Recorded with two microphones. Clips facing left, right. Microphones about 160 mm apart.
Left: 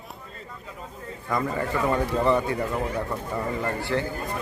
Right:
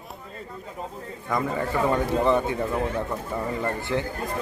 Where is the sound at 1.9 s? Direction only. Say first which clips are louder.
Even; 15° right (ahead or behind).